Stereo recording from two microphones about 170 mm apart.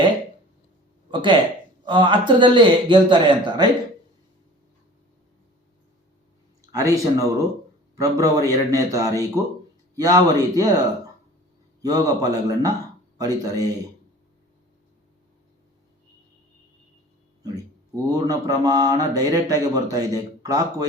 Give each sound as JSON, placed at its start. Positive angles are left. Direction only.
{"t": 1.1, "sound": "mantra", "side_deg": -30}
{"t": 6.7, "sound": "mantra", "side_deg": -20}
{"t": 18.0, "sound": "mantra", "side_deg": -20}